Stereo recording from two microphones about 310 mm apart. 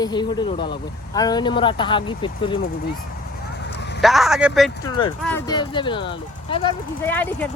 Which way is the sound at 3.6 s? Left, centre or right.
Left.